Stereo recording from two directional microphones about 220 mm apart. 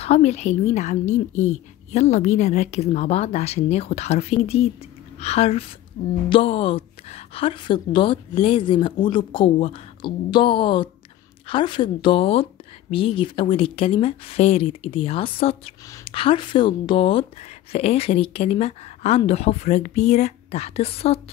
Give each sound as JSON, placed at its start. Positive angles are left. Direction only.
{"t": 0.0, "sound": "speech", "side_deg": 30}